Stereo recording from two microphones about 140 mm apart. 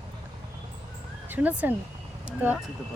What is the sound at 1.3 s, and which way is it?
Speech, 10° right (ahead or behind).